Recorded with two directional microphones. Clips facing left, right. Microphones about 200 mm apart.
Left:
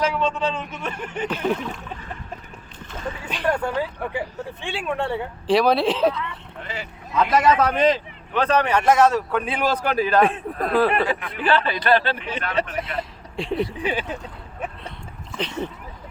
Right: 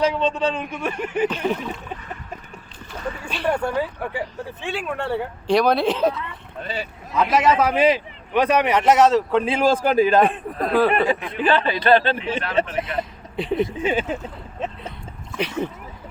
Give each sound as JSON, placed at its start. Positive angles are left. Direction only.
{"t": 0.0, "sound": "a man's voice", "side_deg": -20}
{"t": 3.4, "sound": "a man's voice", "side_deg": -10}
{"t": 9.3, "sound": "speech", "side_deg": -25}
{"t": 10.2, "sound": "speech", "side_deg": 0}
{"t": 10.9, "sound": "speech", "side_deg": -25}
{"t": 12.8, "sound": "speech", "side_deg": 0}
{"t": 13.7, "sound": "speech", "side_deg": -25}
{"t": 15.4, "sound": "a man's voice", "side_deg": -10}